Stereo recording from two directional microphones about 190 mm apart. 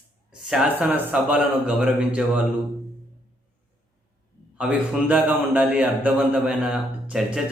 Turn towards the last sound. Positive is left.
turn(degrees=-5)  # may be behind; listen again after turning